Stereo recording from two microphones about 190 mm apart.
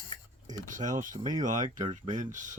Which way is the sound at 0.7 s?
40° right (ahead or behind).